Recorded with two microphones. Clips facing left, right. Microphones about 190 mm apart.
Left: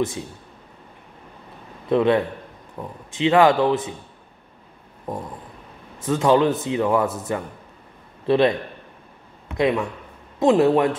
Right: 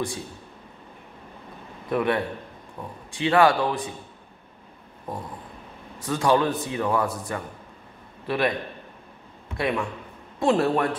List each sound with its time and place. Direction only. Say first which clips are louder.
1.9 s a man's voice: left 6 dB; 20° left (ahead or behind)
6.0 s a man's voice: left 4 dB; 20° left (ahead or behind)
9.6 s a man's voice: left 5 dB; 20° left (ahead or behind)